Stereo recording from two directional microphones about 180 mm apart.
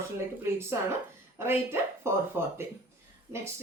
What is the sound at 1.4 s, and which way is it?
Speech, 15° right (ahead or behind).